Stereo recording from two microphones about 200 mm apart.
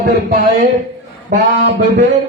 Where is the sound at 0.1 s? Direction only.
45° right (ahead or behind).